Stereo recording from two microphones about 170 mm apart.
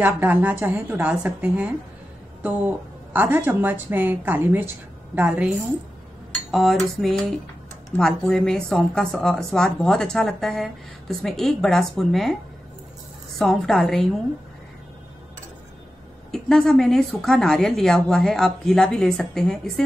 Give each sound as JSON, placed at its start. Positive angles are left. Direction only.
{"t": 0.0, "sound": "a woman's voice", "side_deg": -10}
{"t": 6.5, "sound": "speech", "side_deg": 0}
{"t": 13.4, "sound": "speech", "side_deg": 5}
{"t": 16.3, "sound": "speech", "side_deg": 5}